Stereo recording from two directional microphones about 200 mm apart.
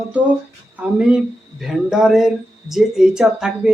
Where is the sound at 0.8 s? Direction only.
5° right (ahead or behind).